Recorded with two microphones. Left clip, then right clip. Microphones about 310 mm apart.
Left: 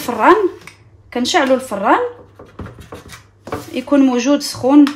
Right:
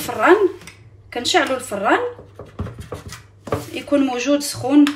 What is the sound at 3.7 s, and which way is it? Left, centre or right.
A woman's voice, left.